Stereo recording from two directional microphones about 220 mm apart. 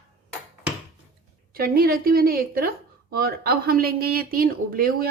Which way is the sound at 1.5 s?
40° right (ahead or behind).